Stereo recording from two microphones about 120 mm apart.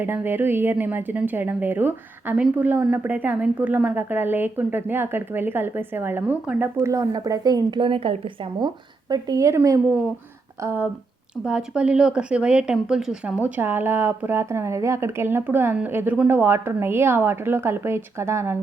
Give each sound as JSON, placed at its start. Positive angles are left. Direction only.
{"t": 0.0, "sound": "speech", "side_deg": -20}
{"t": 6.8, "sound": "a woman's voice", "side_deg": -25}
{"t": 10.6, "sound": "speech", "side_deg": -20}
{"t": 11.4, "sound": "speech", "side_deg": -10}